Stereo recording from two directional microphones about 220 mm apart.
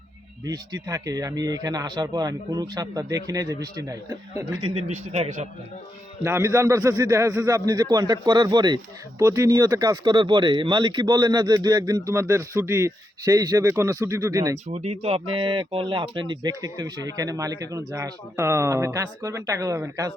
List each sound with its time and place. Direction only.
0.4 s a man's voice: 15° right (ahead or behind)
6.2 s a man's voice: 15° right (ahead or behind)
14.7 s a man's voice: 30° right (ahead or behind); by 20.1 s 15° right (ahead or behind)